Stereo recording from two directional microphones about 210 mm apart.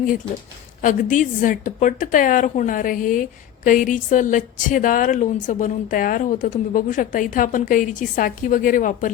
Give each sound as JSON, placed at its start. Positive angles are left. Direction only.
{"t": 0.8, "sound": "a woman's voice", "side_deg": 40}